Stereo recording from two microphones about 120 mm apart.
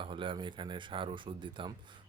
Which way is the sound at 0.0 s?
45° right (ahead or behind).